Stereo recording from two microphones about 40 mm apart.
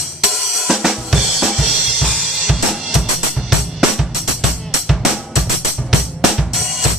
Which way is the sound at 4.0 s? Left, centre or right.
Centre.